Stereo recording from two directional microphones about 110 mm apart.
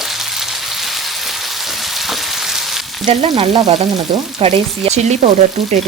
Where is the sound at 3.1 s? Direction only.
70° right (ahead or behind); by 5.3 s 90° right.